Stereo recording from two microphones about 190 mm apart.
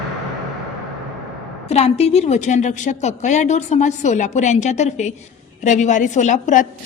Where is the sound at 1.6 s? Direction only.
35° left (ahead or behind).